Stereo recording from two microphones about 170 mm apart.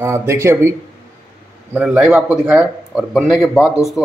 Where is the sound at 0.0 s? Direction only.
15° right (ahead or behind).